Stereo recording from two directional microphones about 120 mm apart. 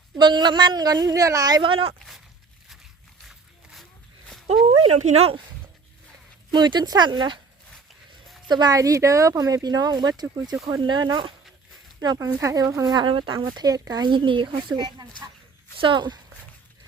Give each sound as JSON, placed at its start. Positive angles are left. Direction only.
{"t": 0.2, "sound": "speech", "side_deg": -40}
{"t": 1.7, "sound": "speech", "side_deg": -50}
{"t": 3.2, "sound": "a sound", "side_deg": 0}
{"t": 4.9, "sound": "speech", "side_deg": -65}
{"t": 6.5, "sound": "speech", "side_deg": -40}
{"t": 8.4, "sound": "speech", "side_deg": -35}
{"t": 12.9, "sound": "speech", "side_deg": -40}